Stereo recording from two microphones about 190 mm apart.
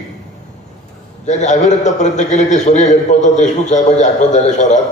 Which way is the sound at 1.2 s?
40° left (ahead or behind).